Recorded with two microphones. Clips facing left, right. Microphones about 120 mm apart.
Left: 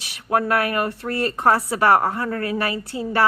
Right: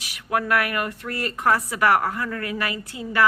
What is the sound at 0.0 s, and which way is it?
Speech, 30° left (ahead or behind).